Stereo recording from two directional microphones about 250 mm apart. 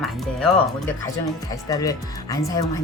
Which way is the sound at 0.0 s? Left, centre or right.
Centre.